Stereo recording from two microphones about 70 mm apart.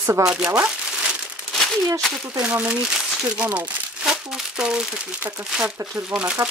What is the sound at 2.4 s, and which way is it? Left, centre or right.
Speech, centre.